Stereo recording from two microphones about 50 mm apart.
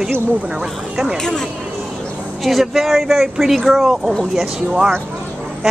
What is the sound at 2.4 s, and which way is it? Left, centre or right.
Speech, centre.